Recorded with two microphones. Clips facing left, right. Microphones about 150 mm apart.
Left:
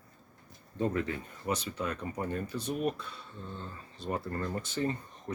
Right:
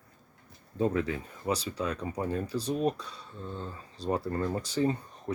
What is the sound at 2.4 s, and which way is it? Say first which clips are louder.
Speech: right 4 dB; 35° right (ahead or behind).